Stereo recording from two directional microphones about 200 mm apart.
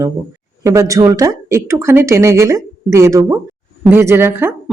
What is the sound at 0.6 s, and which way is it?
Speech, 15° right (ahead or behind).